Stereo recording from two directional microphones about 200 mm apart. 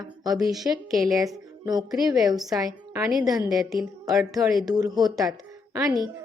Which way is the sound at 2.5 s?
15° right (ahead or behind).